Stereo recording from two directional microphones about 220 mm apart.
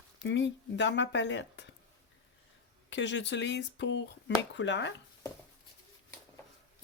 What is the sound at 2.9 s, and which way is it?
Speech, 55° left (ahead or behind).